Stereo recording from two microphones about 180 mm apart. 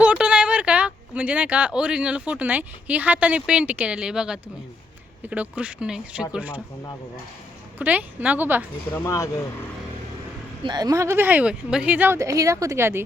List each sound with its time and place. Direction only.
0.0 s speech: 5° right (ahead or behind)
7.8 s speech: 10° right (ahead or behind)
8.9 s speech: 15° left (ahead or behind)
10.6 s speech: 25° right (ahead or behind)